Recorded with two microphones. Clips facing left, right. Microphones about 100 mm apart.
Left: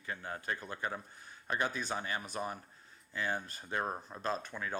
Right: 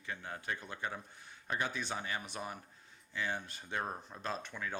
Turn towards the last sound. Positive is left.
turn(degrees=40)  # may be behind; listen again after turning